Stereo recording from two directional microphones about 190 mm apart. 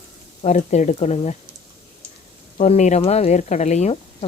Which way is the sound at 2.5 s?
35° left (ahead or behind).